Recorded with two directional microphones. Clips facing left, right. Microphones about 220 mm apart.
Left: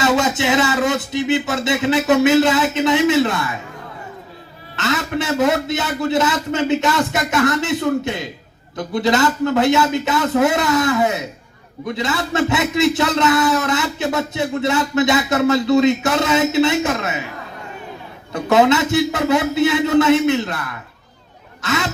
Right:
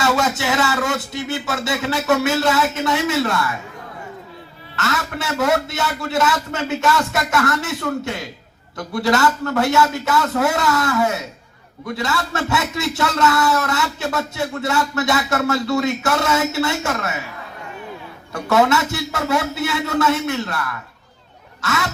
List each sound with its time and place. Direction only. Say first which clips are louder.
0.0 s a man's voice: left 3 dB; 20° left (ahead or behind)
4.8 s a man's voice: left 4 dB; 20° left (ahead or behind)
18.3 s a man's voice: left 3 dB; 20° left (ahead or behind)